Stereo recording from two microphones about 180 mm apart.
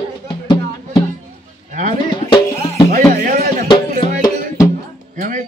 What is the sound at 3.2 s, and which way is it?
Music, 50° right (ahead or behind).